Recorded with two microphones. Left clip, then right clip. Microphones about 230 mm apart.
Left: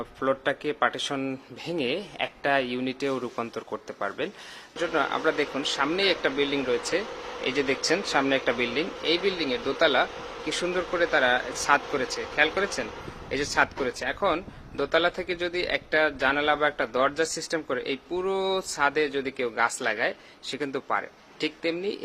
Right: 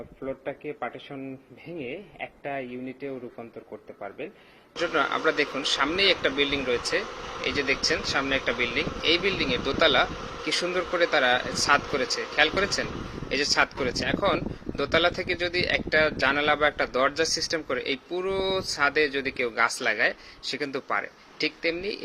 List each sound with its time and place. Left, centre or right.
0.2 s speech: left
4.8 s speech: centre